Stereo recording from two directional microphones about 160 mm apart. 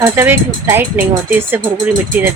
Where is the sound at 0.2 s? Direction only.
15° right (ahead or behind).